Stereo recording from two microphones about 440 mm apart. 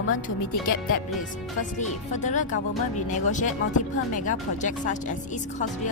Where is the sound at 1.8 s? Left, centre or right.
Centre.